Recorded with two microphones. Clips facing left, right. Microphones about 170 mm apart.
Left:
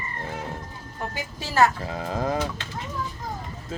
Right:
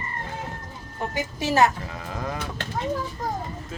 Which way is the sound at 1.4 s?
20° right (ahead or behind).